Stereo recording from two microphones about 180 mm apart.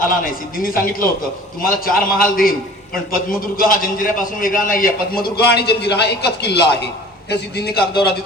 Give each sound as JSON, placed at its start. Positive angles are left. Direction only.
{"t": 0.0, "sound": "a man's voice", "side_deg": 50}